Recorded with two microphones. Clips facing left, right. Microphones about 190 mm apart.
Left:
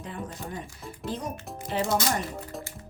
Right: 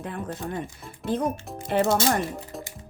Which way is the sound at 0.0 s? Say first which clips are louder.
Right 4 dB; 60° right (ahead or behind).